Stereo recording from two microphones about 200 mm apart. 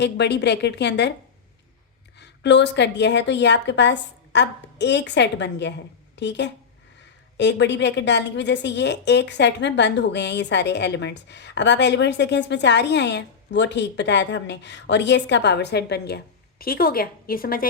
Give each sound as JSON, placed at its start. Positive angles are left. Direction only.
{"t": 0.0, "sound": "a woman's voice", "side_deg": 60}
{"t": 2.1, "sound": "a woman's voice", "side_deg": 60}